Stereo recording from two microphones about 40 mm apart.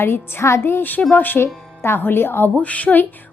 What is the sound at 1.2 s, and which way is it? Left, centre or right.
Speech, left.